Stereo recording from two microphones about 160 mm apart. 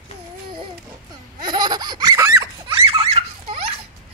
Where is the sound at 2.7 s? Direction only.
35° right (ahead or behind).